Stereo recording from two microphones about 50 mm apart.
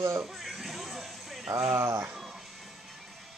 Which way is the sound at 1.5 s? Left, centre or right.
Right.